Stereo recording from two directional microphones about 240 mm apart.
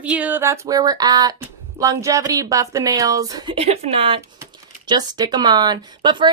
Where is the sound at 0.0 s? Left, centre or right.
Centre.